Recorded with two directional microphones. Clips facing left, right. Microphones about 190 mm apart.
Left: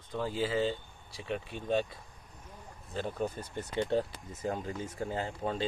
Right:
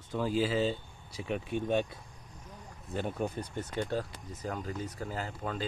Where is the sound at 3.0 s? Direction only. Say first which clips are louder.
Even; 10° right (ahead or behind).